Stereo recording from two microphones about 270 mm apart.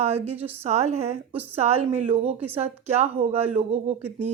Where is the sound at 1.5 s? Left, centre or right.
Right.